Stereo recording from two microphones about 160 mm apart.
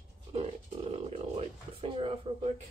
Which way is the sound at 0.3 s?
40° right (ahead or behind).